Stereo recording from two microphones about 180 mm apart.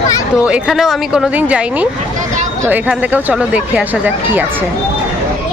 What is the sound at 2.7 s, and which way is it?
Speech, 10° right (ahead or behind).